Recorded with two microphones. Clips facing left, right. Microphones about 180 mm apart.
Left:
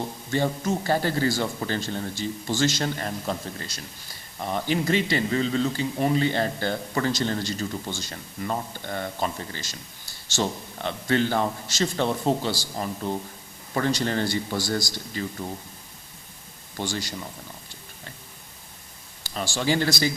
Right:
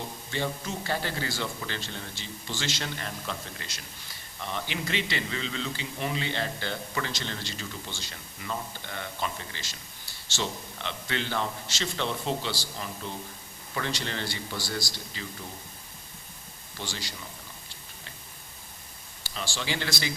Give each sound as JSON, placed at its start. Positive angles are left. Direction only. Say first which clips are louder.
{"t": 0.3, "sound": "a man's voice", "louder": "left 8 dB", "side_deg": 45}
{"t": 16.7, "sound": "a man's voice", "louder": "left 8 dB", "side_deg": 50}
{"t": 19.3, "sound": "a man's voice", "louder": "left 8 dB", "side_deg": 45}